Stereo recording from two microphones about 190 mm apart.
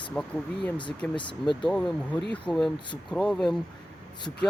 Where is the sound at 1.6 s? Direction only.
5° left (ahead or behind).